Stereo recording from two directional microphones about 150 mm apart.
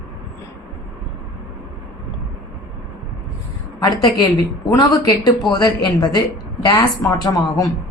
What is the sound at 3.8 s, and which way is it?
A woman's voice, 25° left (ahead or behind).